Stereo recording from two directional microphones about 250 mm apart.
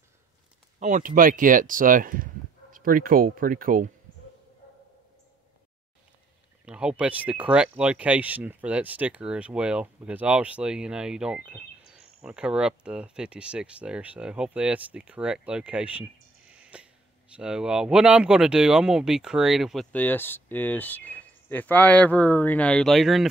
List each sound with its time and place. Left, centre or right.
0.7 s speech: right
6.6 s speech: centre